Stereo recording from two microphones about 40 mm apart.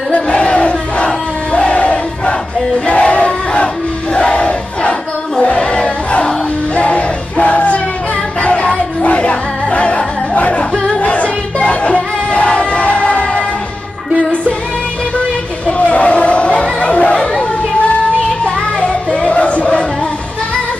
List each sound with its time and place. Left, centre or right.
0.1 s crowd: left
3.0 s battle cry: left
5.4 s crowd: left
6.7 s music: left
15.8 s crowd: left
16.8 s chatter: left
18.4 s children playing: left